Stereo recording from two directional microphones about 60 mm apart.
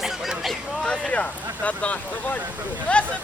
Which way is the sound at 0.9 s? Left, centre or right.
Centre.